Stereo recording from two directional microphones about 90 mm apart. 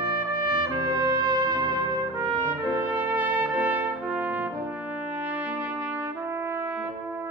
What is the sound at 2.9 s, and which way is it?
Trumpet, 20° right (ahead or behind).